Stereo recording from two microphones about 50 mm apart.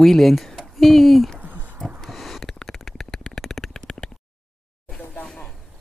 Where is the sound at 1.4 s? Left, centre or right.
Right.